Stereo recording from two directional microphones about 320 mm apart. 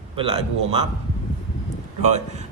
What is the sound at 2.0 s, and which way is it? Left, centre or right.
Speech, right.